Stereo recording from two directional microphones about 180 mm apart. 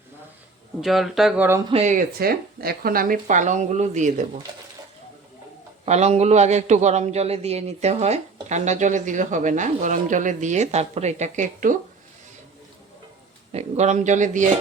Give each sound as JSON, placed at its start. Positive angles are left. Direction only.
{"t": 0.8, "sound": "speech", "side_deg": 0}
{"t": 1.7, "sound": "speech", "side_deg": -40}
{"t": 5.8, "sound": "a man's voice", "side_deg": -35}
{"t": 13.5, "sound": "speech", "side_deg": -35}